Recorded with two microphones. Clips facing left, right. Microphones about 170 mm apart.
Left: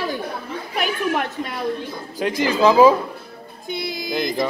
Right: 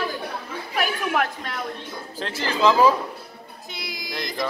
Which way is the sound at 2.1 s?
10° left (ahead or behind).